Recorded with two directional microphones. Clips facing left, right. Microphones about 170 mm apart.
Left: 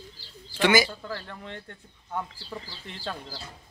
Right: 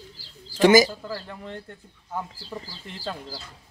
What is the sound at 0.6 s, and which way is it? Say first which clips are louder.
Speech: right 6 dB; 40° right (ahead or behind).